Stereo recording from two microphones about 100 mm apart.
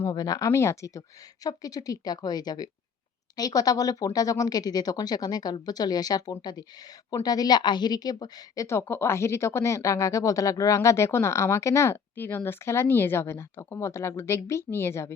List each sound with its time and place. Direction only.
0.1 s a woman's voice: 40° left (ahead or behind)
8.6 s speech: 25° left (ahead or behind)